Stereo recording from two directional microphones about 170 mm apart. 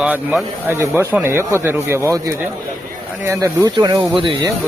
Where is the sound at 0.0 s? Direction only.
10° right (ahead or behind); by 4.4 s 30° right (ahead or behind).